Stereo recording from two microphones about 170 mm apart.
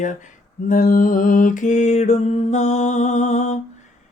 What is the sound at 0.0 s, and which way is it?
Mantra, 45° left (ahead or behind).